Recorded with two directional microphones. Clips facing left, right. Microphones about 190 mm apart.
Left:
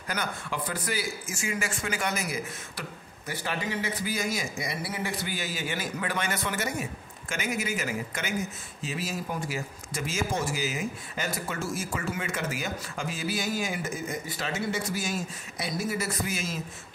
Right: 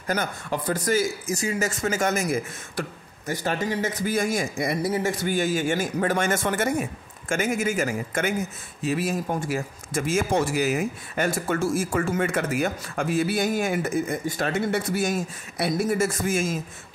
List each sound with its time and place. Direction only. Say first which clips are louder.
0.0 s a man's voice: right 6 dB; 45° right (ahead or behind)